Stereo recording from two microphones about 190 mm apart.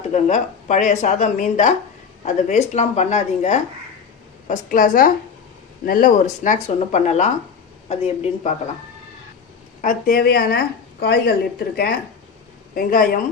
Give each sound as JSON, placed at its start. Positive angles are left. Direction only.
{"t": 0.1, "sound": "a woman's voice", "side_deg": 40}
{"t": 9.8, "sound": "speech", "side_deg": 50}
{"t": 12.7, "sound": "speech", "side_deg": 50}